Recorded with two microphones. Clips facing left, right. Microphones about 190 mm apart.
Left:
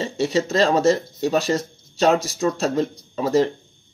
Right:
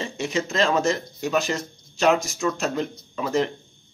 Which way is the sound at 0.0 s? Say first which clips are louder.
Left 5 dB; 35° left (ahead or behind).